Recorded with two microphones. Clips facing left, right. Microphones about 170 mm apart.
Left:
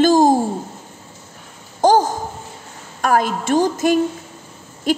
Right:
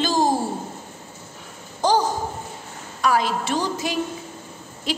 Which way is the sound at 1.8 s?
50° left (ahead or behind).